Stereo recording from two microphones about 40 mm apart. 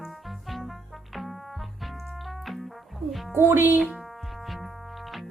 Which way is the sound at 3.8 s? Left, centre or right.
Centre.